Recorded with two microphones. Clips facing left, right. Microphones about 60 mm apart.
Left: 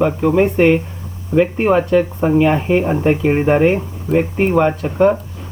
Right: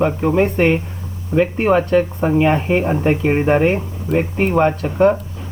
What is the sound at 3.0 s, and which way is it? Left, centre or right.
Speech, centre.